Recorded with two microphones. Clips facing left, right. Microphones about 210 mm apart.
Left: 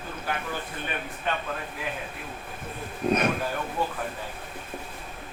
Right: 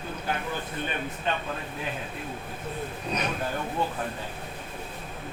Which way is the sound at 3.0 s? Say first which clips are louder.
Left 10 dB; 50° left (ahead or behind).